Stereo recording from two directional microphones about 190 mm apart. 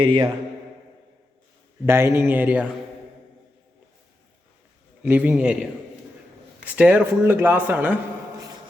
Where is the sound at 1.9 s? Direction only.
15° right (ahead or behind).